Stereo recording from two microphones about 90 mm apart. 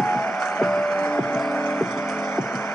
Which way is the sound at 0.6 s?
5° left (ahead or behind).